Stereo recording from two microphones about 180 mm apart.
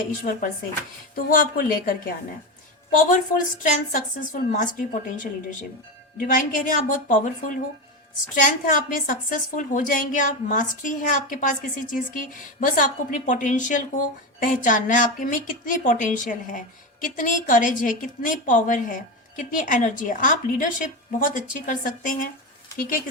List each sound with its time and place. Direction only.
1.1 s speech: 50° left (ahead or behind)